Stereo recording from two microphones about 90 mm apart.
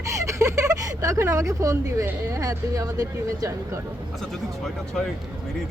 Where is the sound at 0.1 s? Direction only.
35° right (ahead or behind).